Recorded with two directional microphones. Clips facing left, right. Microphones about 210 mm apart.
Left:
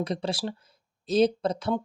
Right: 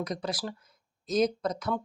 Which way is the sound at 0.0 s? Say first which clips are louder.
Left 4 dB; 30° left (ahead or behind).